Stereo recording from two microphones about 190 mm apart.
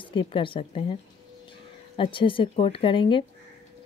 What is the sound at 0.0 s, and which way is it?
Speech, 25° left (ahead or behind).